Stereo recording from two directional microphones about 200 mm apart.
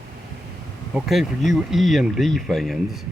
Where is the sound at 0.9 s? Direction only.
Centre (ahead or behind).